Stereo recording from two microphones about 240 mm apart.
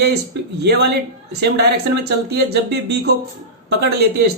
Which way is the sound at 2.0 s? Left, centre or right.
Right.